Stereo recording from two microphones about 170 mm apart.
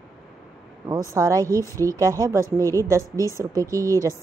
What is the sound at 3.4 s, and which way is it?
Speech, 20° right (ahead or behind).